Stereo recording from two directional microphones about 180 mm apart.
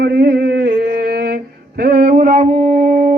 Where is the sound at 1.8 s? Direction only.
55° right (ahead or behind).